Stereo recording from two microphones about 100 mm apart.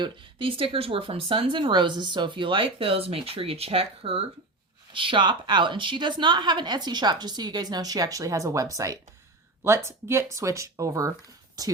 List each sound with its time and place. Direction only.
0.0 s speech: 60° right (ahead or behind)
4.9 s a woman's voice: 55° right (ahead or behind); by 11.7 s 40° right (ahead or behind)